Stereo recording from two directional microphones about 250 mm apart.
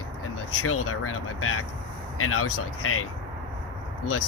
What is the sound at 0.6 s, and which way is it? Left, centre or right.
Speech, left.